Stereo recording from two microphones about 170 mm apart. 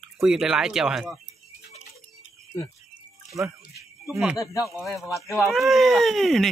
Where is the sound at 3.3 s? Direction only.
20° right (ahead or behind).